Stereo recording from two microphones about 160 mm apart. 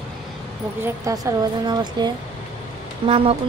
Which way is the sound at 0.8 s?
20° right (ahead or behind).